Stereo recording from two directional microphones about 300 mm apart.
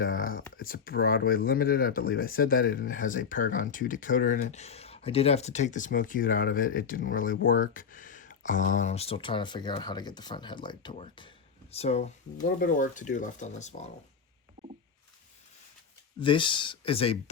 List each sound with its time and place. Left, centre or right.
0.5 s speech: left
16.2 s speech: centre